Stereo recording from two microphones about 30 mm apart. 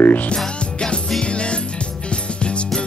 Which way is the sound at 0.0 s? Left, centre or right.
Left.